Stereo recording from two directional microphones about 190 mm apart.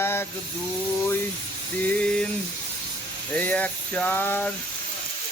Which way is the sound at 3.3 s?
10° left (ahead or behind).